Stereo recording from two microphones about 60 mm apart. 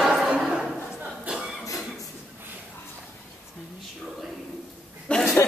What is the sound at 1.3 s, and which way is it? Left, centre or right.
Cough, centre.